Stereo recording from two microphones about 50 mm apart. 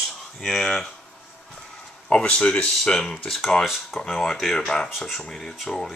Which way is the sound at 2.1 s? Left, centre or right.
Centre.